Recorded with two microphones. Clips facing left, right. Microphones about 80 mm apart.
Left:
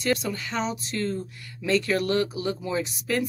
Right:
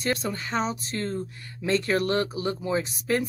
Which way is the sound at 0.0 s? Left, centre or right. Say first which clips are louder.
Left 2 dB; right.